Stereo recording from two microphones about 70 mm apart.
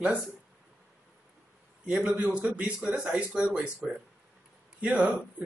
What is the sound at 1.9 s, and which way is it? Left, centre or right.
A man's voice, centre.